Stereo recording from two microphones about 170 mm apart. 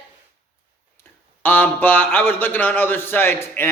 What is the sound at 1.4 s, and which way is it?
A man's voice, 10° left (ahead or behind).